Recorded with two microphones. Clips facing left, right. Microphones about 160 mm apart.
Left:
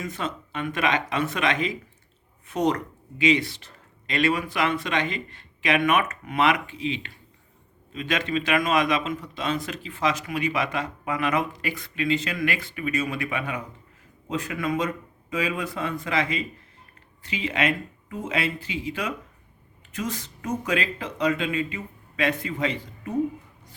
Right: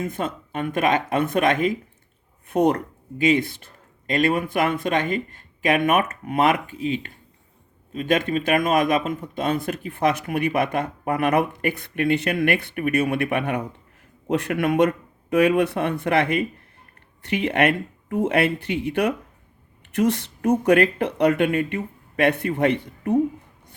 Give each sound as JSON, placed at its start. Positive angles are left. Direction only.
{"t": 0.0, "sound": "speech", "side_deg": -55}